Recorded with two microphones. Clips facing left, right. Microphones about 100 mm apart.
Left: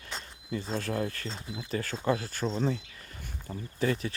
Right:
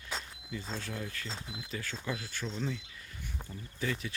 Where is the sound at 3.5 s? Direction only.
90° left.